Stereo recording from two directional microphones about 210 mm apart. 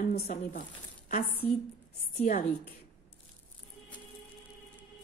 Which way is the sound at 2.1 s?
40° left (ahead or behind).